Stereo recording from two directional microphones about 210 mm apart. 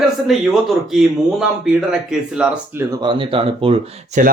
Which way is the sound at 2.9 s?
20° right (ahead or behind).